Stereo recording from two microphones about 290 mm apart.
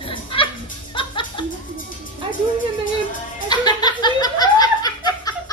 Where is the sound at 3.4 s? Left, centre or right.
Centre.